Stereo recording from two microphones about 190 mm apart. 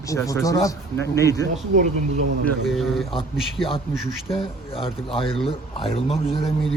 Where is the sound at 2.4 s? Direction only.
Centre (ahead or behind).